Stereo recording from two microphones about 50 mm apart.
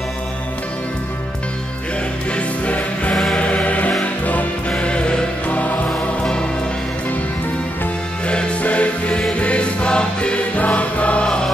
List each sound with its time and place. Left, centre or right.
2.3 s music: left
4.6 s music: left
8.3 s music: left